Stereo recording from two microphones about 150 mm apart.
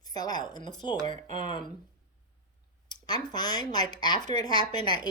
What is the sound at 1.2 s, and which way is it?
Speech, 55° right (ahead or behind).